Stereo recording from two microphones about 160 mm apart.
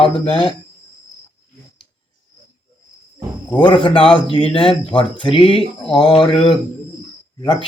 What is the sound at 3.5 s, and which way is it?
Speech, 30° left (ahead or behind).